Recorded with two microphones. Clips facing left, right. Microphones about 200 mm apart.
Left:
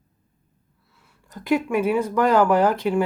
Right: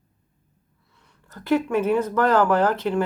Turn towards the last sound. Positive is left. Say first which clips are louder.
# left 2 dB
turn(degrees=10)  # may be behind; listen again after turning